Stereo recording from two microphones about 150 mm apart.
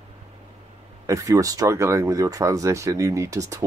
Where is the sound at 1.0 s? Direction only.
20° right (ahead or behind).